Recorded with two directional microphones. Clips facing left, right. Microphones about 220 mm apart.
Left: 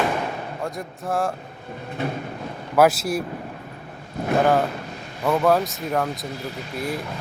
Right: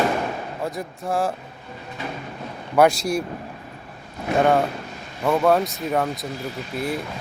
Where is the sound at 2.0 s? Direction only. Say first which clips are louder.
Left 5 dB; 60° left (ahead or behind).